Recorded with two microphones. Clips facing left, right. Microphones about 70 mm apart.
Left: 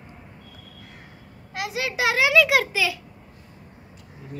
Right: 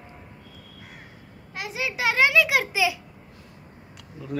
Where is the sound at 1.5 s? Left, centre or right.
Left.